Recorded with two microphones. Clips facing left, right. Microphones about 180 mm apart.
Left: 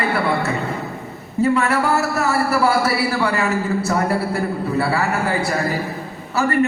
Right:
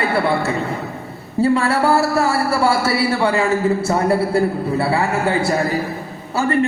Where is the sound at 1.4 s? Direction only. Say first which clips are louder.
Right 2 dB; 30° right (ahead or behind).